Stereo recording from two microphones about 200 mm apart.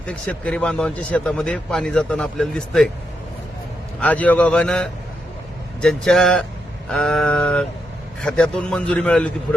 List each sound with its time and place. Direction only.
0.1 s speech: 5° left (ahead or behind)
4.0 s a man's voice: 5° left (ahead or behind)